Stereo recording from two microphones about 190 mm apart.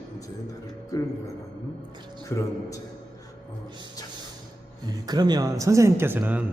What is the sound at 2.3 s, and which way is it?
Speech, 15° left (ahead or behind).